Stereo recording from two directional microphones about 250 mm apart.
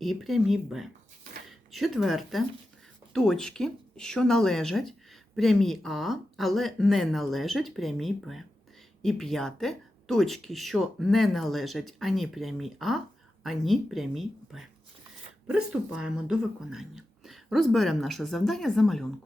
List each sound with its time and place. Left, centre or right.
0.0 s speech: centre